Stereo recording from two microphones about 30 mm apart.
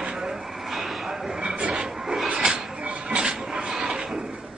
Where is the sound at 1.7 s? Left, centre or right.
Centre.